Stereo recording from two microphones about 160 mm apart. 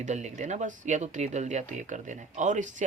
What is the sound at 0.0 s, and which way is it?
Speech, 45° right (ahead or behind).